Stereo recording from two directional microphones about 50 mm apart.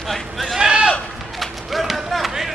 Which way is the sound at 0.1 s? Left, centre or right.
Centre.